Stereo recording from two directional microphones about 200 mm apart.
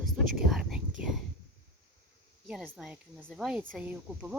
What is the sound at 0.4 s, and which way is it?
Whispering, centre (ahead or behind).